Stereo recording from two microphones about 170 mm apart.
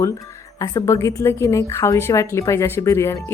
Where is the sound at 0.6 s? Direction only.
20° left (ahead or behind).